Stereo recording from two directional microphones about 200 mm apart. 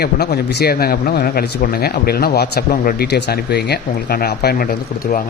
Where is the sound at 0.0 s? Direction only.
50° left (ahead or behind).